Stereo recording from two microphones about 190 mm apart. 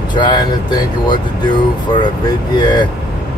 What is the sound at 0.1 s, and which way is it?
Speech, 25° left (ahead or behind).